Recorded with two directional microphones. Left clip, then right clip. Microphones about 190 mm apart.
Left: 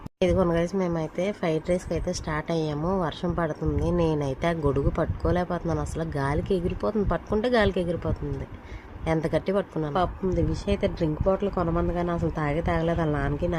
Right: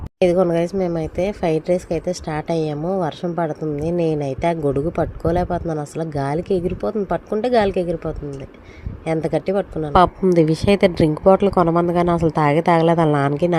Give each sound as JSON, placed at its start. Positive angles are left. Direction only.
{"t": 0.2, "sound": "speech", "side_deg": -20}
{"t": 9.9, "sound": "speech", "side_deg": -45}